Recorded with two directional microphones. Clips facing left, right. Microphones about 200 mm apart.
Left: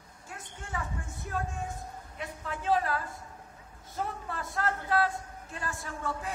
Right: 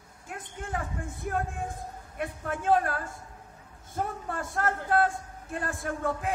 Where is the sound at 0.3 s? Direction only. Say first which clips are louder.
Right 5 dB; 55° right (ahead or behind).